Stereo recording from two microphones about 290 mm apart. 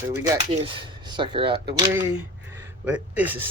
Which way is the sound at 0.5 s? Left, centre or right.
Centre.